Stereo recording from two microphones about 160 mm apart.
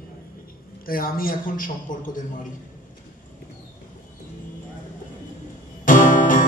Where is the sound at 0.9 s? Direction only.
65° left (ahead or behind).